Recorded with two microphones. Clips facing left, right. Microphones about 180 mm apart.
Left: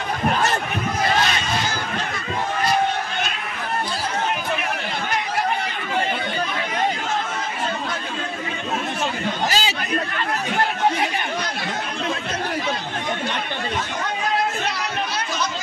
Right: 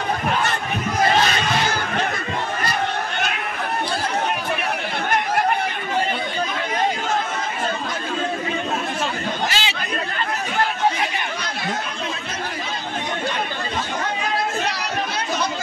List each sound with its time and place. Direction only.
9.5 s chatter: 40° left (ahead or behind)